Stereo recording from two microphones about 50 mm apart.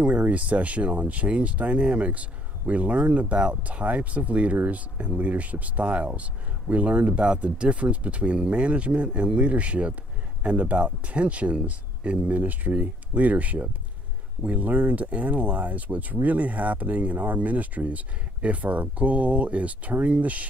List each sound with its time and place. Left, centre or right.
0.0 s speech: right